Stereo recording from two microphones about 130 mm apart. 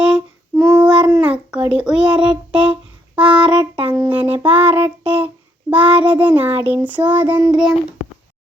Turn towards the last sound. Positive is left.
turn(degrees=0)  # may be behind; listen again after turning